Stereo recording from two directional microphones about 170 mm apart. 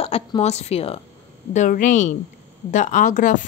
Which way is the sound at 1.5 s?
45° left (ahead or behind).